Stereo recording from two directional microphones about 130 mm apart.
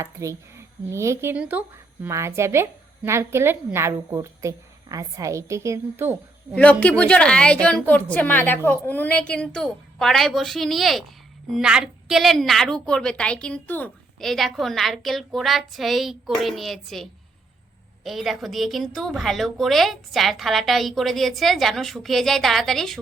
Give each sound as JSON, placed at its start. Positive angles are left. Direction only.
{"t": 0.0, "sound": "speech", "side_deg": -20}
{"t": 6.6, "sound": "a woman's voice", "side_deg": 10}
{"t": 14.2, "sound": "a woman's voice", "side_deg": 0}